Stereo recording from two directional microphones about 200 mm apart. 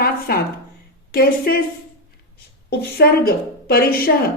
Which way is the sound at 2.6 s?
50° left (ahead or behind).